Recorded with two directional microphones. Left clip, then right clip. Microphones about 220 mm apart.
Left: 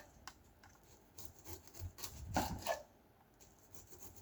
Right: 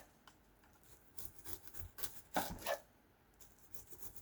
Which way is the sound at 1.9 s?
15° right (ahead or behind).